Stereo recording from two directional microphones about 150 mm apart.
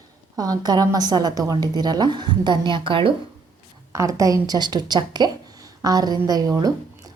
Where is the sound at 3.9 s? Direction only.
20° right (ahead or behind).